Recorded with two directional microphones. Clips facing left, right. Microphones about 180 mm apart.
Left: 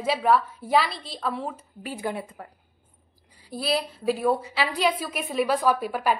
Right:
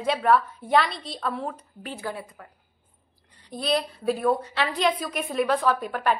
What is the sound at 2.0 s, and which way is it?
Speech, 20° left (ahead or behind).